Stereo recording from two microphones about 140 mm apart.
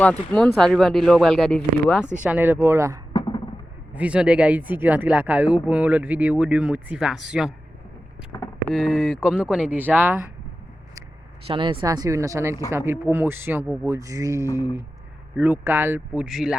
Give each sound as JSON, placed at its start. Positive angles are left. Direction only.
{"t": 0.0, "sound": "speech", "side_deg": 10}
{"t": 2.2, "sound": "speech", "side_deg": -15}
{"t": 3.1, "sound": "a sound", "side_deg": 30}
{"t": 3.9, "sound": "speech", "side_deg": -10}
{"t": 8.3, "sound": "vehicle", "side_deg": 25}
{"t": 8.7, "sound": "speech", "side_deg": 0}
{"t": 11.4, "sound": "speech", "side_deg": -35}
{"t": 15.4, "sound": "speech", "side_deg": -10}